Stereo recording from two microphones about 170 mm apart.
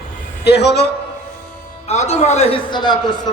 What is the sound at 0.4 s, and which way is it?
Speech, 80° left.